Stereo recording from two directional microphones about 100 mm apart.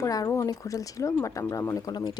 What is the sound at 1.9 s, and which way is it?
Speech, 45° left (ahead or behind).